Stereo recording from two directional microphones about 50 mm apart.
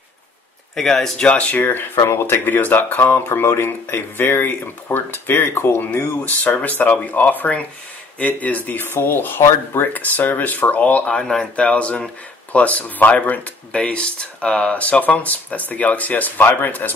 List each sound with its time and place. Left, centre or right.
0.7 s speech: centre
1.1 s speech: left
1.6 s speech: left
9.8 s speech: left